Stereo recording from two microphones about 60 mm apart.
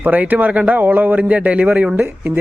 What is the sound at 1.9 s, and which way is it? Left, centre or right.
Speech, right.